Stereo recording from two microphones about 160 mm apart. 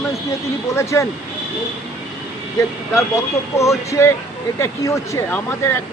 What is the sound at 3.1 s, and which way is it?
Speech, 20° left (ahead or behind).